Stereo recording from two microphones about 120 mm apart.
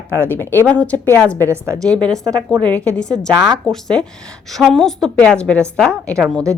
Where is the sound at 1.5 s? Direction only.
25° right (ahead or behind).